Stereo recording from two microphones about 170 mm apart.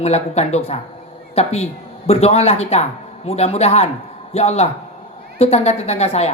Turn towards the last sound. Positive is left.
turn(degrees=40)  # may be behind; listen again after turning